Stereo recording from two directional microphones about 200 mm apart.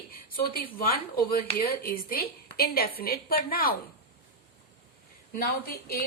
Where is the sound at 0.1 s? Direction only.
45° left (ahead or behind).